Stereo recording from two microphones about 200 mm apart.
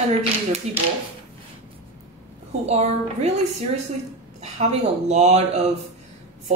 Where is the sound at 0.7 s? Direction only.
35° right (ahead or behind).